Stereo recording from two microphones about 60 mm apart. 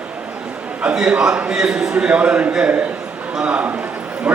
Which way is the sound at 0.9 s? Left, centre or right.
Centre.